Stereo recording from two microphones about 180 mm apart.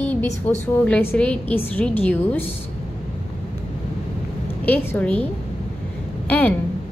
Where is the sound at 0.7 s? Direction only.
10° left (ahead or behind).